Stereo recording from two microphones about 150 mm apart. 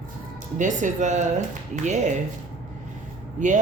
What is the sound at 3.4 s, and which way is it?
Speech, 55° right (ahead or behind).